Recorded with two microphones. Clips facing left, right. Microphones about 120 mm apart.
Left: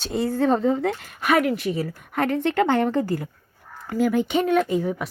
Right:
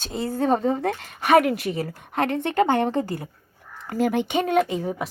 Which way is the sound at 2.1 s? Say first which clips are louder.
Left 1 dB; 20° right (ahead or behind).